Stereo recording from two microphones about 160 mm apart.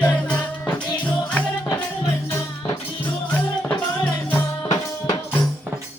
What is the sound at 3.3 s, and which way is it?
Music, 10° left (ahead or behind).